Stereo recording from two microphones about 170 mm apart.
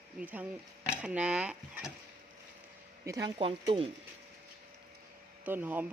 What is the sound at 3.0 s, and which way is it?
Speech, 20° right (ahead or behind).